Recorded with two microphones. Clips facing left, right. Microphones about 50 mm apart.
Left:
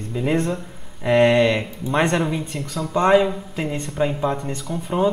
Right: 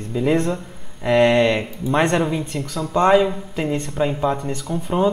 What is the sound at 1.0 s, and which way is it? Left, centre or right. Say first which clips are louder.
Speech: even; centre.